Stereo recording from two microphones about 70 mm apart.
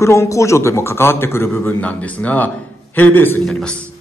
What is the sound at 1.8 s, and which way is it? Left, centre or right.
Speech, left.